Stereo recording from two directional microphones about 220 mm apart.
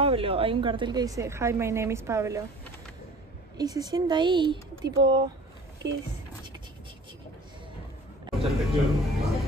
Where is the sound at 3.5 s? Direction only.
15° right (ahead or behind).